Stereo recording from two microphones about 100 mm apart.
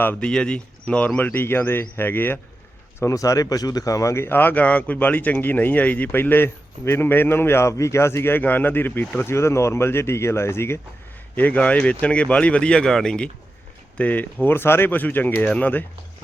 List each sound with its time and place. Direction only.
0.0 s speech: 20° left (ahead or behind)
3.0 s speech: 30° left (ahead or behind); by 15.8 s 15° left (ahead or behind)